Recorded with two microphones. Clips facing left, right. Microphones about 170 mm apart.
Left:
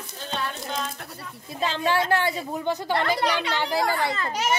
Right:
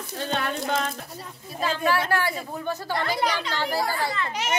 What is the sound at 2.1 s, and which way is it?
Speech, 20° left (ahead or behind).